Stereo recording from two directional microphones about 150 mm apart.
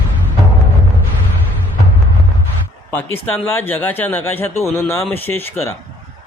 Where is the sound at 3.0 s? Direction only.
15° left (ahead or behind).